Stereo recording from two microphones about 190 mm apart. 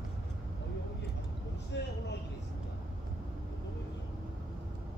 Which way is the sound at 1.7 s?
65° left (ahead or behind).